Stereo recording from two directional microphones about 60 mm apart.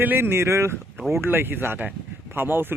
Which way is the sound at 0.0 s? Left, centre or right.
Right.